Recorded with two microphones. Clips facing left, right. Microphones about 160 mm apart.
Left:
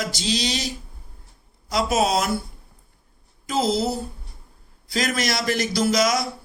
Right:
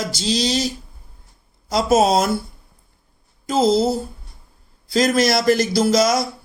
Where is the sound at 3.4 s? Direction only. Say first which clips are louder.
Right 6 dB; 40° right (ahead or behind).